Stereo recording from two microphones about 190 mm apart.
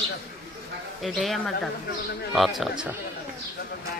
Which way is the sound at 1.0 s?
Centre (ahead or behind).